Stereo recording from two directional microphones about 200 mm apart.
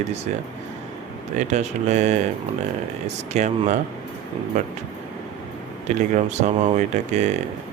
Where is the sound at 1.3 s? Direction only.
35° right (ahead or behind).